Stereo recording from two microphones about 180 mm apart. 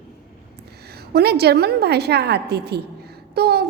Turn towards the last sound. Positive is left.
turn(degrees=-60)  # may be behind; listen again after turning